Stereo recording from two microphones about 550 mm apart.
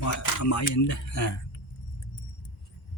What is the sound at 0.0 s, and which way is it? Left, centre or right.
Speech, left.